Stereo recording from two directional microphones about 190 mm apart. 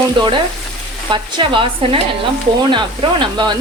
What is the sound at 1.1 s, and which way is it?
Speech, 25° right (ahead or behind).